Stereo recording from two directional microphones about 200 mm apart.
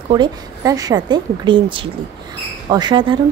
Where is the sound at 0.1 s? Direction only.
20° right (ahead or behind).